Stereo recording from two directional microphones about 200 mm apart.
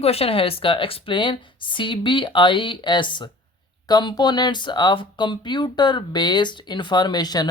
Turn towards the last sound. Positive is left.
turn(degrees=20)  # may be behind; listen again after turning